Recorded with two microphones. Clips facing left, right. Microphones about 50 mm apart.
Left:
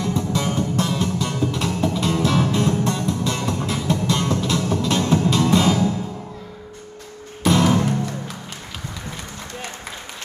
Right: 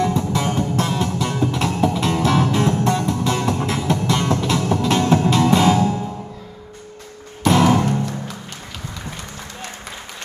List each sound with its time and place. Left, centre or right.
0.0 s music: right
7.4 s music: centre